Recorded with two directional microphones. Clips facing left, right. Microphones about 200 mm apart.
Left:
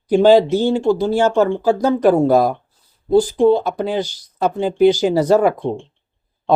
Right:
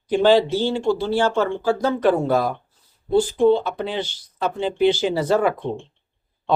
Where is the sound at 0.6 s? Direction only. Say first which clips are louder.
Left 5 dB; 45° left (ahead or behind).